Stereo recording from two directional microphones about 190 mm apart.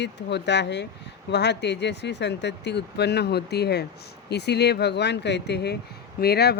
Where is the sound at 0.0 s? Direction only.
65° left (ahead or behind).